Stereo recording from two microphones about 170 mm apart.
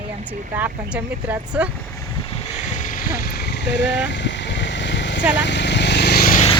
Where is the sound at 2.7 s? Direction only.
50° left (ahead or behind); by 3.8 s 90° left.